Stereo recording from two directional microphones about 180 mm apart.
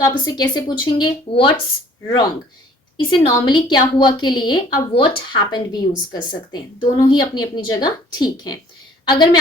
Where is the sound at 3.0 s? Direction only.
25° left (ahead or behind).